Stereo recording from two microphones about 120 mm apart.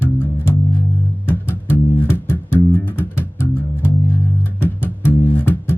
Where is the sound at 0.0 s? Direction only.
20° left (ahead or behind).